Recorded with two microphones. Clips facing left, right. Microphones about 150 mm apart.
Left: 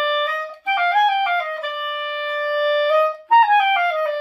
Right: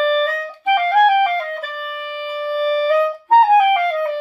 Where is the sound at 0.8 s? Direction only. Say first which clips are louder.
Right 3 dB; 40° right (ahead or behind).